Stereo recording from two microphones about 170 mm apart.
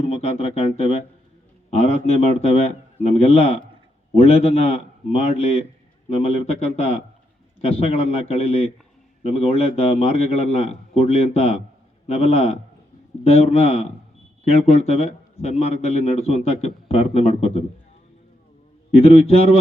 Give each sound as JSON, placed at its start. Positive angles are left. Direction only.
{"t": 0.1, "sound": "a man's voice", "side_deg": 35}
{"t": 2.0, "sound": "a man's voice", "side_deg": 35}
{"t": 18.9, "sound": "a man's voice", "side_deg": 35}